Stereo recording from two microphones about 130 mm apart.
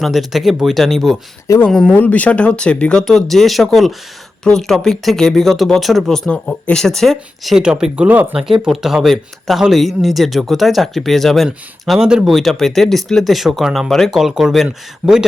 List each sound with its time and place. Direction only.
0.0 s speech: centre (ahead or behind)
1.5 s speech: 20° left (ahead or behind)
1.7 s speech: 5° left (ahead or behind)